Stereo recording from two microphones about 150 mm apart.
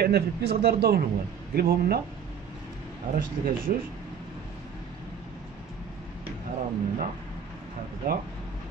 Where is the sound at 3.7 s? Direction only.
55° right (ahead or behind).